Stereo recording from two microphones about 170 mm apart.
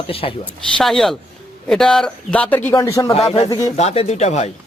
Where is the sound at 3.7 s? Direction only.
40° left (ahead or behind).